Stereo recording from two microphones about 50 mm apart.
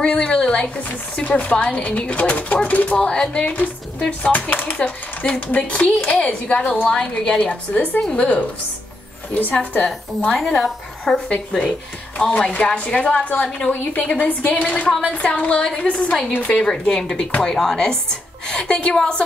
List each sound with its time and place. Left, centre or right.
0.0 s a woman's voice: centre
1.2 s speech: left
3.4 s a woman's voice: left
9.8 s a woman's voice: centre
12.2 s speech: left
13.2 s a woman's voice: left
14.9 s a woman's voice: centre
15.2 s speech: left
16.1 s a woman's voice: centre